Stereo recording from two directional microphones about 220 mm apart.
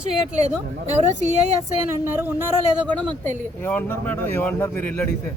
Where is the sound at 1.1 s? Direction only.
35° right (ahead or behind).